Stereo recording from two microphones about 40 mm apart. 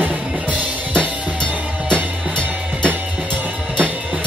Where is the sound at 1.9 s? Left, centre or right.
Right.